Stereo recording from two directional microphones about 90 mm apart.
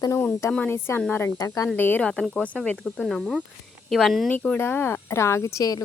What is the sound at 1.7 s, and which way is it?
A woman's voice, 20° left (ahead or behind).